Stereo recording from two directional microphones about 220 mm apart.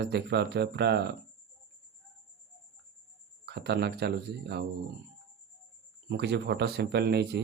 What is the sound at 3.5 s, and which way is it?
Speech, 50° right (ahead or behind).